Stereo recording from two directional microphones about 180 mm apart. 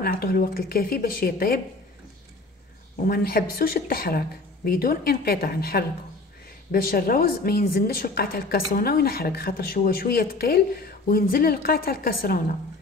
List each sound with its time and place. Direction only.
0.0 s a woman's voice: 55° left (ahead or behind)
3.0 s a woman's voice: 55° left (ahead or behind)